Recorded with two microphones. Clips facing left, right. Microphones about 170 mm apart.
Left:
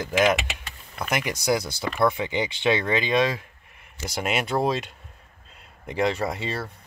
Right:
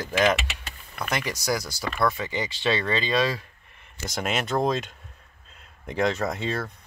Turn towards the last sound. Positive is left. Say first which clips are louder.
# right 1 dB
turn(degrees=5)  # may be behind; listen again after turning